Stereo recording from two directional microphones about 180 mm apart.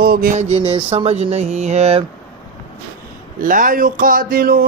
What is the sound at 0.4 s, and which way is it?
Speech, 35° right (ahead or behind).